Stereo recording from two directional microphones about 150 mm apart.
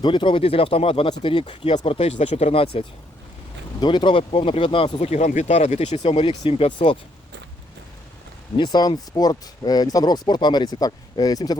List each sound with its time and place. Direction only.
0.0 s speech: 30° left (ahead or behind)
8.5 s speech: 30° left (ahead or behind)